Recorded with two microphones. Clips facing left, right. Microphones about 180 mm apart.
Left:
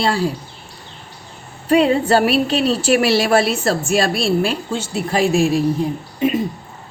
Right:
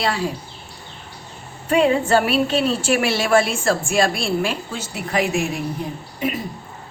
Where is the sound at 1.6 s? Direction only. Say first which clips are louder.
Left 3 dB; 35° left (ahead or behind).